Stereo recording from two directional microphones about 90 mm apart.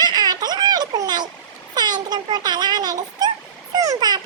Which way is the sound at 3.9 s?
50° right (ahead or behind).